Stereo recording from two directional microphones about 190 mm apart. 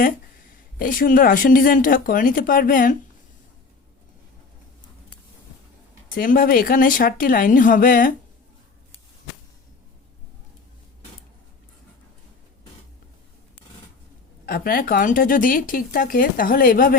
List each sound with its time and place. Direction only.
0.8 s speech: 45° left (ahead or behind)
6.1 s speech: 45° left (ahead or behind)
14.4 s speech: 50° left (ahead or behind)